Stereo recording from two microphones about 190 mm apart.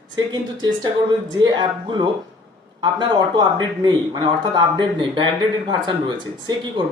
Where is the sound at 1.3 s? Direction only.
20° right (ahead or behind).